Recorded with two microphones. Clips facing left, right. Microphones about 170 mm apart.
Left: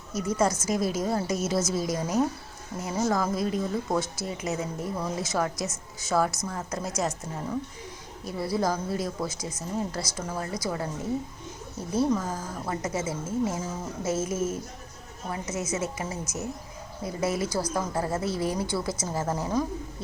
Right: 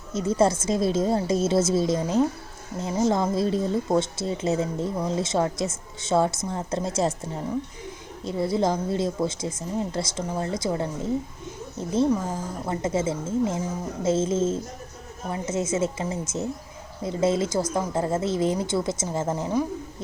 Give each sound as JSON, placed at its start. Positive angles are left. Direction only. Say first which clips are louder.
{"t": 0.1, "sound": "speech", "louder": "right 4 dB", "side_deg": -25}
{"t": 8.2, "sound": "speech", "louder": "right 4 dB", "side_deg": -25}
{"t": 12.7, "sound": "a woman's voice", "louder": "right 6 dB", "side_deg": -25}